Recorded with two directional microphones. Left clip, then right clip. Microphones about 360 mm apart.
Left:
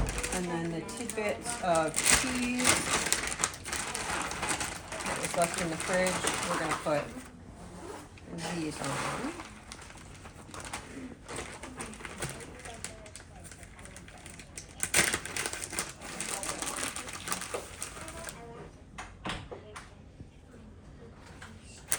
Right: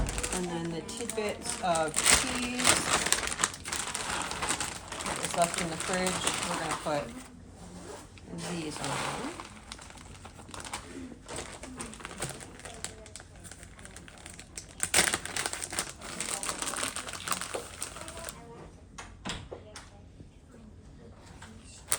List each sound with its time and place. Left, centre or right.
0.0 s a sound: centre
8.5 s speech: centre
10.5 s bird: centre
12.0 s pigeon: centre
14.5 s crumpling: centre